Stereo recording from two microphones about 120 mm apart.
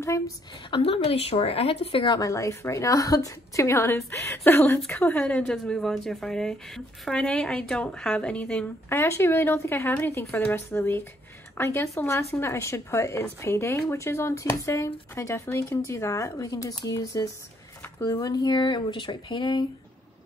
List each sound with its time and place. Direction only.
0.7 s speech: 50° left (ahead or behind)
2.1 s a woman's voice: 30° left (ahead or behind)